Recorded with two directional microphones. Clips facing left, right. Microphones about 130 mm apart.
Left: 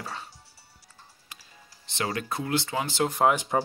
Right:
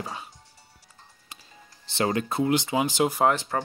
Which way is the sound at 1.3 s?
25° right (ahead or behind).